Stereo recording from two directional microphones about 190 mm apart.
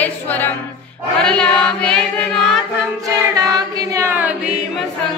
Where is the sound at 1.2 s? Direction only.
5° left (ahead or behind).